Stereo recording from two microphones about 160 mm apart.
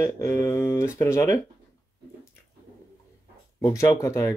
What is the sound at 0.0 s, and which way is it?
Speech, 20° left (ahead or behind).